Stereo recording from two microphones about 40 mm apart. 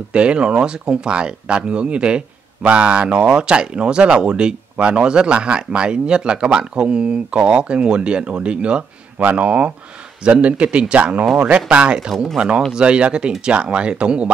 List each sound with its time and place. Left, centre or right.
0.1 s speech: right